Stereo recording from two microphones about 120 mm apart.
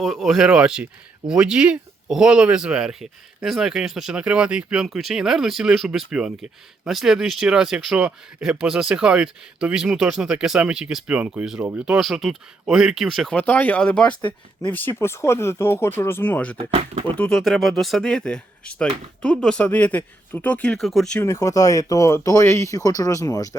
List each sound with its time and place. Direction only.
0.0 s speech: centre (ahead or behind)
13.3 s speech: 10° left (ahead or behind)
14.7 s speech: 15° left (ahead or behind)
16.6 s speech: 60° right (ahead or behind)
17.2 s speech: 5° left (ahead or behind)
21.2 s speech: 25° left (ahead or behind)